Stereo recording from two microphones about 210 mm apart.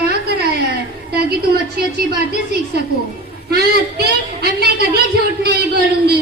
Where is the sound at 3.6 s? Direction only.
50° right (ahead or behind).